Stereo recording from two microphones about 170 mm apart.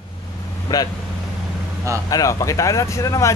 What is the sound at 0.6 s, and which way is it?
Speech, 25° left (ahead or behind).